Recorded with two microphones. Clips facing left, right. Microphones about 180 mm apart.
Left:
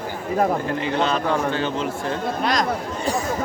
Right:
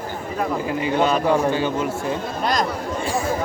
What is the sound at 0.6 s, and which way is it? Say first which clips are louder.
Speech: right 2 dB; 10° right (ahead or behind).